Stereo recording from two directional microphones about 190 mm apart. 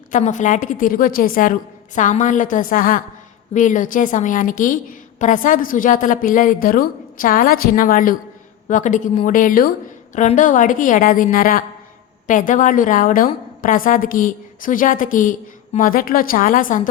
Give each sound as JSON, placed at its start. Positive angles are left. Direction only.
{"t": 0.1, "sound": "a woman's voice", "side_deg": 40}